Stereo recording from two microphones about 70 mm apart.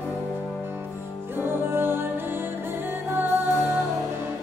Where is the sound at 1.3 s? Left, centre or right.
Right.